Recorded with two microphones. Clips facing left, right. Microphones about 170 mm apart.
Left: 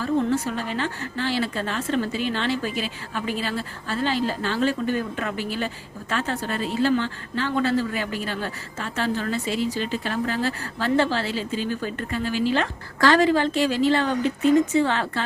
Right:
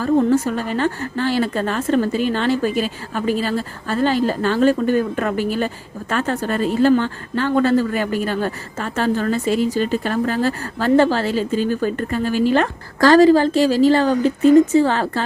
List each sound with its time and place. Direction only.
0.0 s a woman's voice: 45° right (ahead or behind)